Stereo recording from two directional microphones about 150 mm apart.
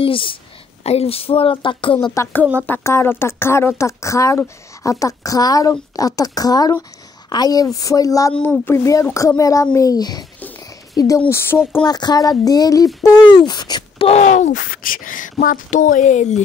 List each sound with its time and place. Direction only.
0.0 s a woman's voice: 35° left (ahead or behind)
2.6 s speech: 15° left (ahead or behind)
8.3 s speech: 10° left (ahead or behind); by 10.2 s 25° left (ahead or behind)
11.1 s speech: 15° left (ahead or behind)
11.8 s speech: 25° left (ahead or behind)
14.0 s speech: 50° left (ahead or behind)